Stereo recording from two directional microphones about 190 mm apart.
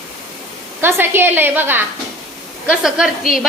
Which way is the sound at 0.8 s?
10° right (ahead or behind).